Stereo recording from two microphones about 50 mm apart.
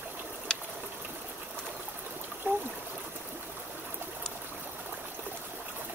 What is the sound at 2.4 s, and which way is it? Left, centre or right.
Stream, right.